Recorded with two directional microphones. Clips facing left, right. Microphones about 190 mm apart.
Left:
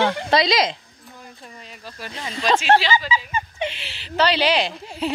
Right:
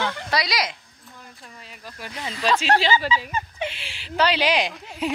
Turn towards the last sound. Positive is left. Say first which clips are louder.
# left 1 dB
turn(degrees=-10)  # may be behind; listen again after turning